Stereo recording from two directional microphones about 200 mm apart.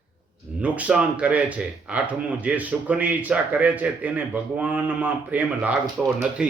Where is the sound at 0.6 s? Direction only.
5° right (ahead or behind).